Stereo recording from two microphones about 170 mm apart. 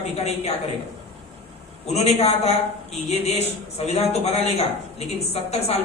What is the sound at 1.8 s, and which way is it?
Speech, 40° left (ahead or behind).